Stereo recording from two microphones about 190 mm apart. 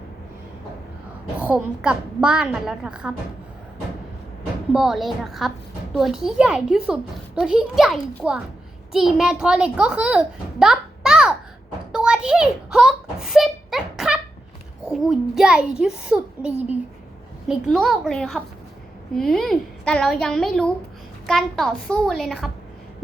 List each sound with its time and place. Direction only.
1.4 s a woman's voice: 5° right (ahead or behind)
4.7 s a woman's voice: 5° right (ahead or behind)
11.9 s a sound: 5° right (ahead or behind)
14.8 s a woman's voice: centre (ahead or behind)
17.5 s a woman's voice: centre (ahead or behind)